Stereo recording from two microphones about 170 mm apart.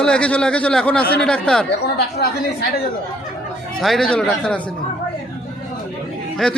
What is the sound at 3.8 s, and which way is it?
Speech, centre (ahead or behind).